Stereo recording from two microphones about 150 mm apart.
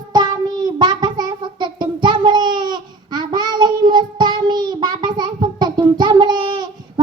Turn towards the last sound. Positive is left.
turn(degrees=-30)  # may be behind; listen again after turning